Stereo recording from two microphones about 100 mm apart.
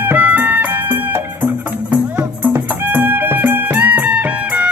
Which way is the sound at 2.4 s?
20° right (ahead or behind).